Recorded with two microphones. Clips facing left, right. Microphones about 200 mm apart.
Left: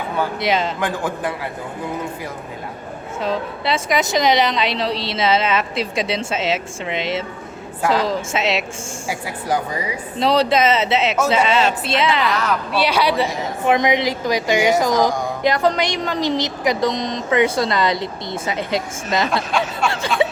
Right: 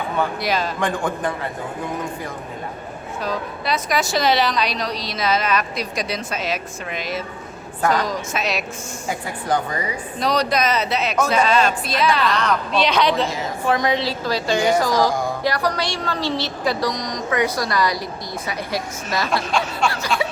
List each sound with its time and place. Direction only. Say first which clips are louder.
0.3 s a woman's voice: left 3 dB; 20° left (ahead or behind)
0.8 s speech: even; 5° left (ahead or behind)
3.2 s a woman's voice: left 3 dB; 25° left (ahead or behind)
9.0 s a woman's voice: even; 10° left (ahead or behind)
10.2 s a woman's voice: left 4 dB; 25° left (ahead or behind)
12.3 s a woman's voice: even; 5° left (ahead or behind); by 19.3 s 20° left (ahead or behind)
19.3 s speech: left 1 dB; centre (ahead or behind)